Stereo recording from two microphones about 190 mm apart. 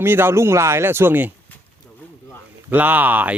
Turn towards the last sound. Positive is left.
turn(degrees=-10)  # may be behind; listen again after turning